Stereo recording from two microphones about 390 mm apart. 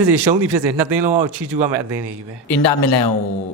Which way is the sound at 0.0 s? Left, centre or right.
Right.